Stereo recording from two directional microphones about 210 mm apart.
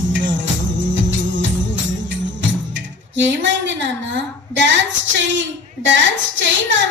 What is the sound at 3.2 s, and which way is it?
A woman's voice, 60° right (ahead or behind).